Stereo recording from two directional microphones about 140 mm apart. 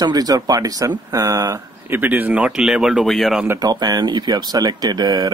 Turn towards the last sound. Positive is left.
turn(degrees=-30)  # may be behind; listen again after turning